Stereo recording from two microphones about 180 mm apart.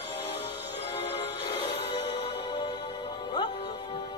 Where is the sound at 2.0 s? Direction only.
30° left (ahead or behind).